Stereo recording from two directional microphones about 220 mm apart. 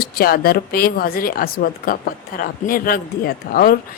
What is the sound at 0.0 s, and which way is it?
A woman's voice, 45° left (ahead or behind).